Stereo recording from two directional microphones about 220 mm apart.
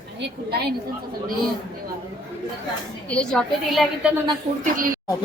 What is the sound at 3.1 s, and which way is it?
Speech, 5° left (ahead or behind).